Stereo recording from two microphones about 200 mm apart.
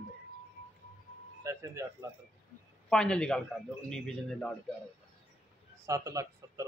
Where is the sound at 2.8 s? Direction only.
5° left (ahead or behind).